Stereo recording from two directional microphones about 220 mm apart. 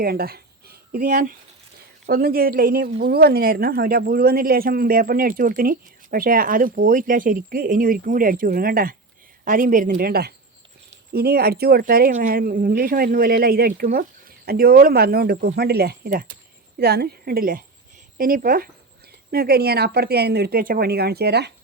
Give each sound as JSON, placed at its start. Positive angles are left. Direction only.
{"t": 0.0, "sound": "a woman's voice", "side_deg": -45}